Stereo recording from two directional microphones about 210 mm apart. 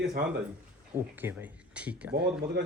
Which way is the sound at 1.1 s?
10° right (ahead or behind).